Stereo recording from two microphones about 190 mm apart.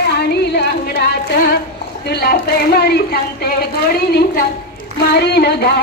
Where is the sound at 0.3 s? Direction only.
55° left (ahead or behind).